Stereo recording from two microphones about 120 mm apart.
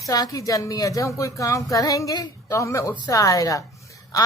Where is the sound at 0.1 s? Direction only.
30° left (ahead or behind).